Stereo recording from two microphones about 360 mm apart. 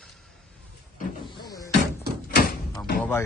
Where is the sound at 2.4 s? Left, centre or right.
Left.